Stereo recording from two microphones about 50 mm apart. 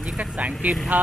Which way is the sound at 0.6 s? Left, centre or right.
Right.